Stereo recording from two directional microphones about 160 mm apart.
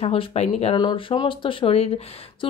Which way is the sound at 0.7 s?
30° left (ahead or behind).